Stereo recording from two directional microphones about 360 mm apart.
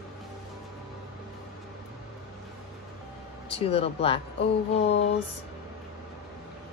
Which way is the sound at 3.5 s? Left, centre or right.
Centre.